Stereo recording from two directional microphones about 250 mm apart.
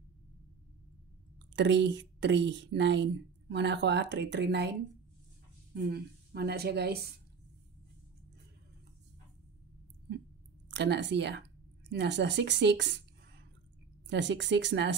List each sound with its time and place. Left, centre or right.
1.5 s speech: right
5.8 s speech: right
10.7 s speech: right
14.0 s speech: right